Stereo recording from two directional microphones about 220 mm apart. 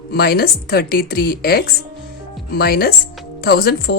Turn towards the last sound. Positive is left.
turn(degrees=45)  # may be behind; listen again after turning